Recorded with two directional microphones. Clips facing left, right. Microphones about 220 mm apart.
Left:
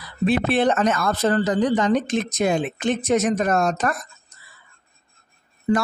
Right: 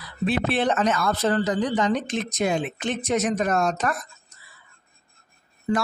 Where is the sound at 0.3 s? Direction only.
45° left (ahead or behind).